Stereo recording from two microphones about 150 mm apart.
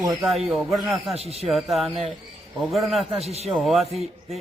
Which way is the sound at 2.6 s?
Centre (ahead or behind).